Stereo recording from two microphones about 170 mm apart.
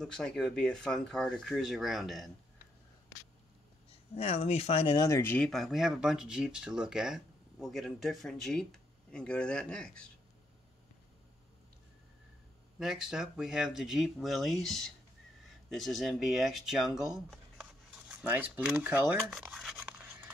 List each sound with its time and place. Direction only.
0.0 s speech: 5° left (ahead or behind)
4.1 s speech: 35° left (ahead or behind)
4.9 s speech: 20° left (ahead or behind)
12.7 s speech: 5° right (ahead or behind)
19.8 s a sound: 10° right (ahead or behind)